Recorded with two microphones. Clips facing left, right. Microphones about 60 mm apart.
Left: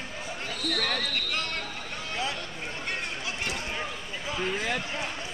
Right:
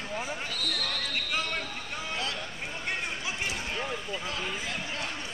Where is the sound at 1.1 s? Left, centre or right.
Centre.